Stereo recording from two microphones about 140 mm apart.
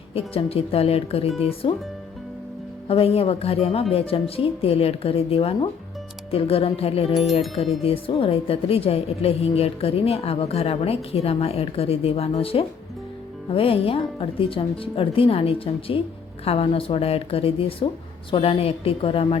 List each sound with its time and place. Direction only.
0.1 s speech: 45° left (ahead or behind)
2.8 s speech: 45° left (ahead or behind)